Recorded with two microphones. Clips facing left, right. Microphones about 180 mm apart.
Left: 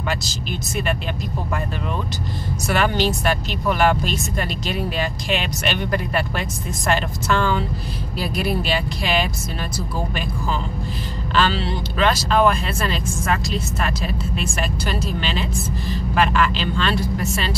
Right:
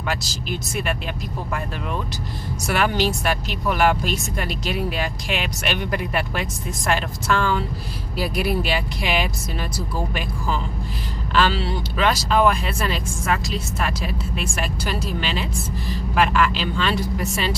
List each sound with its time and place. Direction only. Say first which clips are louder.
0.1 s speech: right 3 dB; 5° right (ahead or behind)
2.7 s speech: left 1 dB; 10° right (ahead or behind)
11.3 s speech: even; 10° right (ahead or behind)